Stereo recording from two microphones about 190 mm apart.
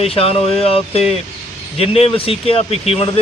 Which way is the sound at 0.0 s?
30° left (ahead or behind).